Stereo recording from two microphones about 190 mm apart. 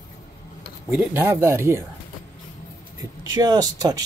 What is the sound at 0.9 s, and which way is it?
Speech, 10° right (ahead or behind).